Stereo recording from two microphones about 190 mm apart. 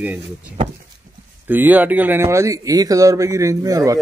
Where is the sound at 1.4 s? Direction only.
10° right (ahead or behind).